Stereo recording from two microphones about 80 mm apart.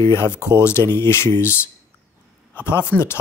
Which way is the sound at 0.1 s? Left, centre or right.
Left.